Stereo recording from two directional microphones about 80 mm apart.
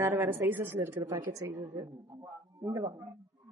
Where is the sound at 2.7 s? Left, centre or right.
Right.